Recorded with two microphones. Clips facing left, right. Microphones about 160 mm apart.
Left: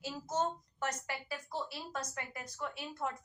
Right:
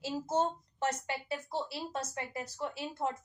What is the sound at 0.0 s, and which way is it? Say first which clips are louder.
Speech: right 4 dB; 30° right (ahead or behind).